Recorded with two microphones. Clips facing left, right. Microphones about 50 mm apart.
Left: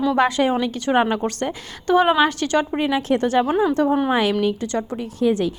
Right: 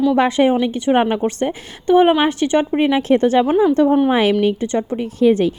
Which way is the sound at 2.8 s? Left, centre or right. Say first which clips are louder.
Right 5 dB; right.